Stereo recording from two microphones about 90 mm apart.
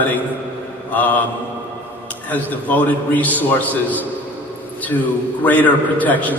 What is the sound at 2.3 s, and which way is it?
A man's voice, 15° left (ahead or behind).